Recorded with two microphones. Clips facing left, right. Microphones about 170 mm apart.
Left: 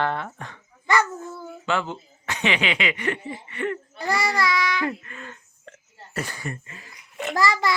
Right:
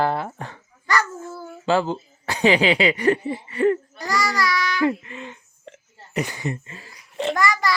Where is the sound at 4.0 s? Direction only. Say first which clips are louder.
Even; 30° left (ahead or behind).